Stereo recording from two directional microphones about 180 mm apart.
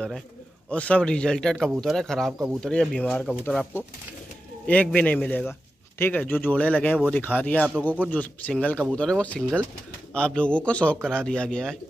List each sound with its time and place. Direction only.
0.7 s a man's voice: 5° left (ahead or behind)